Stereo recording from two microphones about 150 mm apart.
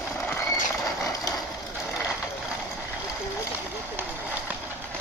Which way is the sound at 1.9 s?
5° right (ahead or behind).